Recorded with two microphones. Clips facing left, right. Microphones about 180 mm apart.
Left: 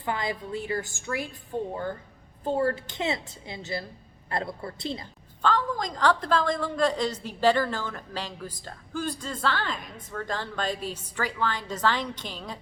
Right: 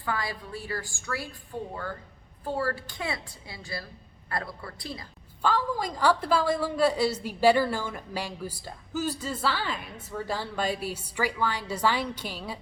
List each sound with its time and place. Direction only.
0.0 s a woman's voice: 20° left (ahead or behind)
5.4 s a woman's voice: 10° right (ahead or behind)